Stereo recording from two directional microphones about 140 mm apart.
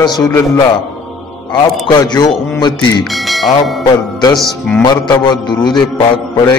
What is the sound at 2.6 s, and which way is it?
Music, 30° left (ahead or behind).